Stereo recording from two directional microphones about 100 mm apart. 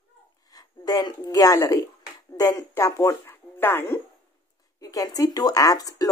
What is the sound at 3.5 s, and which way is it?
Speech, 20° left (ahead or behind).